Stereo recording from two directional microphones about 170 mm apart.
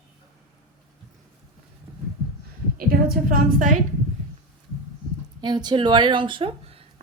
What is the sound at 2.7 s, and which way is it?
A woman's voice, 60° right (ahead or behind).